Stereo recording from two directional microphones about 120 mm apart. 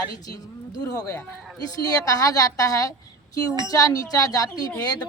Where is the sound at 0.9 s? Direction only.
30° left (ahead or behind).